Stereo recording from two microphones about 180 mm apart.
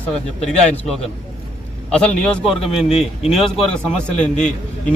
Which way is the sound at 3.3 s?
Centre (ahead or behind).